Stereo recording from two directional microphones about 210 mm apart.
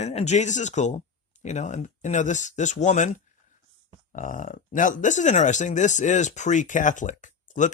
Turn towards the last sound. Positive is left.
turn(degrees=35)  # may be behind; listen again after turning